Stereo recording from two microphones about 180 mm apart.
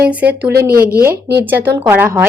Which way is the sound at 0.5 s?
55° right (ahead or behind).